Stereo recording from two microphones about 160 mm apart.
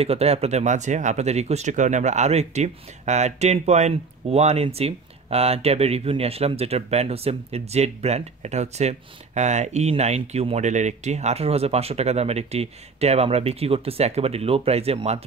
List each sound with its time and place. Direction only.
0.0 s speech: 40° right (ahead or behind)